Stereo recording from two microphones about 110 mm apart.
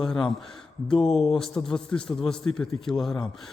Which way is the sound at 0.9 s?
50° left (ahead or behind).